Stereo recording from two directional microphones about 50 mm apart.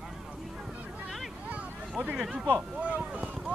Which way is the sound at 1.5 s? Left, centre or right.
Right.